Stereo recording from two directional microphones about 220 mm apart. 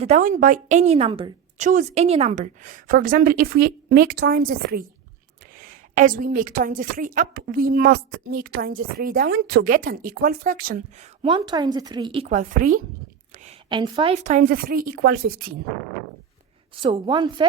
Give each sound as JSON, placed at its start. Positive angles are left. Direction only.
{"t": 0.0, "sound": "a woman's voice", "side_deg": -35}
{"t": 11.2, "sound": "a woman's voice", "side_deg": -25}
{"t": 13.4, "sound": "a woman's voice", "side_deg": -25}
{"t": 16.8, "sound": "a woman's voice", "side_deg": -20}